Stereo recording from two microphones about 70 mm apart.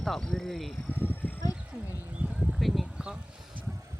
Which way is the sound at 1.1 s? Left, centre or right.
Left.